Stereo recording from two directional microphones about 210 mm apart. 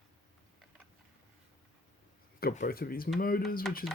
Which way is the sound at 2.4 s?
40° left (ahead or behind).